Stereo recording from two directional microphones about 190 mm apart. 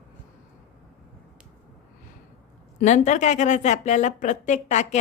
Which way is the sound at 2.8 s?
40° left (ahead or behind).